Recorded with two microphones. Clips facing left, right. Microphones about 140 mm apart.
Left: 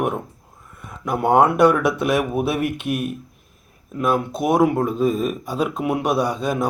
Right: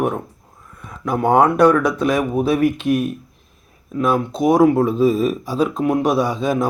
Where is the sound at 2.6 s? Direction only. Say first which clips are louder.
Right 7 dB; 60° left (ahead or behind).